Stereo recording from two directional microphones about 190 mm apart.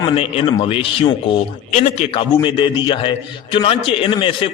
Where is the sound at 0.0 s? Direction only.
30° left (ahead or behind).